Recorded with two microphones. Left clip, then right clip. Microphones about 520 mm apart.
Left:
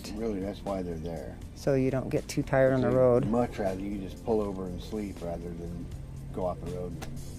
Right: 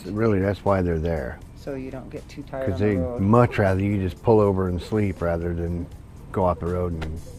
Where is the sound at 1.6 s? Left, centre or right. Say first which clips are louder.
Left 6 dB; left.